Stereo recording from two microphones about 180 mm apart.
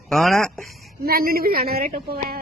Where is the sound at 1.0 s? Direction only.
55° right (ahead or behind).